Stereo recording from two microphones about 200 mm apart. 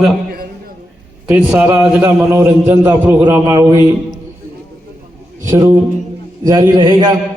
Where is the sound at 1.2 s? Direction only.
10° right (ahead or behind).